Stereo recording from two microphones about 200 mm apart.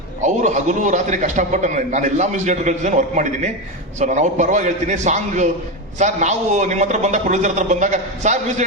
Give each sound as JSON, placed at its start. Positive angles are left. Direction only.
{"t": 0.2, "sound": "a man's voice", "side_deg": -35}